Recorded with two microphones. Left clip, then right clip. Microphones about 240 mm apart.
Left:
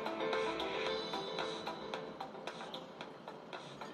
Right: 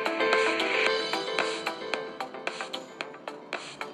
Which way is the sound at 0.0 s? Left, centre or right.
Right.